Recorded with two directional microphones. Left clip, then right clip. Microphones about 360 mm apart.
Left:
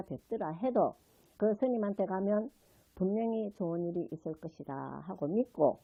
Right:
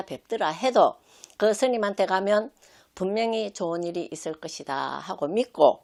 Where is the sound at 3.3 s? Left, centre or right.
Right.